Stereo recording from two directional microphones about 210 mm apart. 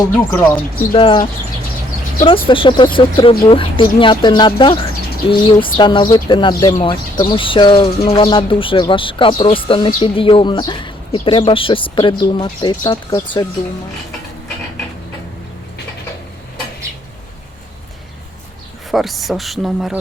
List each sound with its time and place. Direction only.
0.1 s speech: 10° left (ahead or behind)
0.9 s speech: 25° left (ahead or behind)
2.5 s speech: 25° left (ahead or behind)
18.9 s speech: centre (ahead or behind)